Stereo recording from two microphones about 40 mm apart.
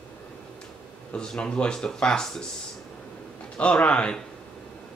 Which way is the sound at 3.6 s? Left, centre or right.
Left.